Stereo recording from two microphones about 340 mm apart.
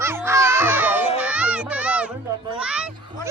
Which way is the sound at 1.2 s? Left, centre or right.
Centre.